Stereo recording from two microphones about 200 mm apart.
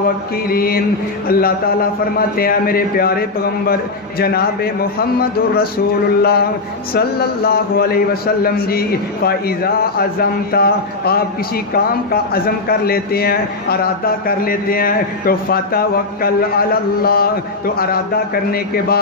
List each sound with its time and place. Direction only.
0.5 s a man's voice: 50° left (ahead or behind)